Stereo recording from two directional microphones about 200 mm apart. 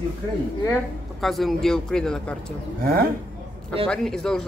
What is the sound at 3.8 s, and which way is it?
Speech, 5° left (ahead or behind).